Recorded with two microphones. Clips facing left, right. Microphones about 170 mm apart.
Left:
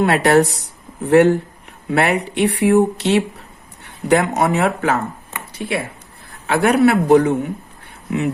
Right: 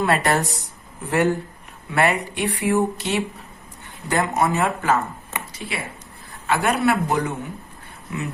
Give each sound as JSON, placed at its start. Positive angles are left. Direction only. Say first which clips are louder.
{"t": 0.0, "sound": "speech", "louder": "left 7 dB", "side_deg": 70}